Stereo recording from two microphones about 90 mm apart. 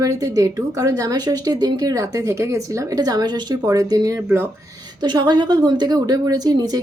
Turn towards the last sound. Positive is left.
turn(degrees=-45)  # may be behind; listen again after turning